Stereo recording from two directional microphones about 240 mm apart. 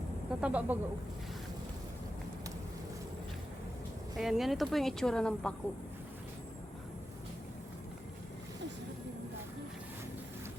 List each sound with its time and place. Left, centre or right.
0.4 s speech: centre
4.2 s speech: centre